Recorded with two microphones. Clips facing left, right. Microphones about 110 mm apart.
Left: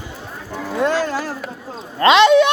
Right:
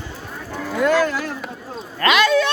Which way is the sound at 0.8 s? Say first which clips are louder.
Right 1 dB; 30° left (ahead or behind).